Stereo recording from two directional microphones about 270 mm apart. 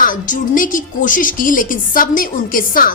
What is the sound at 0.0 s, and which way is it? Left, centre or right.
A woman's voice, left.